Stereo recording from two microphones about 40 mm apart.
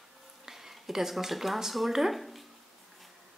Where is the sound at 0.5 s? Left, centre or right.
Centre.